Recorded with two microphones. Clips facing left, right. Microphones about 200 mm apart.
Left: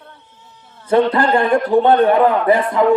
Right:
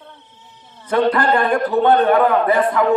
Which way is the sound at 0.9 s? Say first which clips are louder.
Left 2 dB; 25° left (ahead or behind).